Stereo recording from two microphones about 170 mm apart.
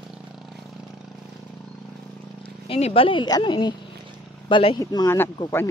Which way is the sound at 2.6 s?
35° left (ahead or behind).